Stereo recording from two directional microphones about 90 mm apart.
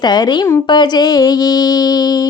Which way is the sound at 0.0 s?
50° left (ahead or behind).